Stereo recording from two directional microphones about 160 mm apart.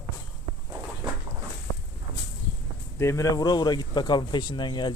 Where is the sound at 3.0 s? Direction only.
20° left (ahead or behind).